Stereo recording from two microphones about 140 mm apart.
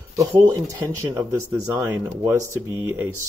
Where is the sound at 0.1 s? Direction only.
20° right (ahead or behind).